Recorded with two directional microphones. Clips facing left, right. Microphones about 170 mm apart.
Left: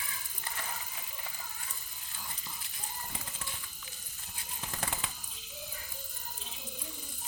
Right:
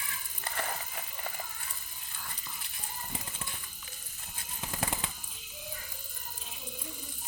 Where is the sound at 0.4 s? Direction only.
65° right (ahead or behind).